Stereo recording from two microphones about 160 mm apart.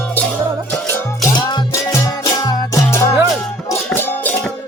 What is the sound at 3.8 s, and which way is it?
Music, 10° left (ahead or behind).